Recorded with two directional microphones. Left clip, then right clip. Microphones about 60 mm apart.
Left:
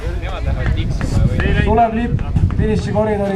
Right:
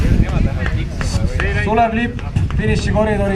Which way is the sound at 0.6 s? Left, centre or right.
Right.